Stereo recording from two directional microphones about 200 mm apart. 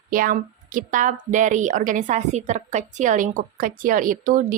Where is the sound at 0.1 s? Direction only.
45° right (ahead or behind).